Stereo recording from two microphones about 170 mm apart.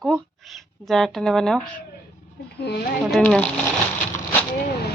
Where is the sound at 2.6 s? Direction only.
75° left (ahead or behind).